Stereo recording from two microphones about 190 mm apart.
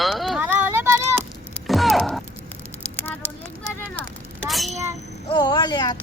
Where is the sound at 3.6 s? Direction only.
5° left (ahead or behind).